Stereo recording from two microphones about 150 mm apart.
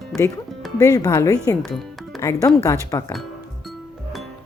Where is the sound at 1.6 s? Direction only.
Centre (ahead or behind).